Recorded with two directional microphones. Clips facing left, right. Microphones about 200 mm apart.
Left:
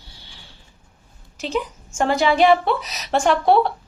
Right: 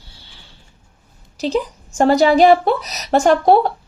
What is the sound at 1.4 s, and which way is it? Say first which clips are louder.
Speech: right 5 dB; 35° right (ahead or behind).